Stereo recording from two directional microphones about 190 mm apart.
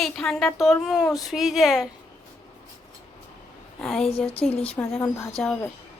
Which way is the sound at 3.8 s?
Centre (ahead or behind).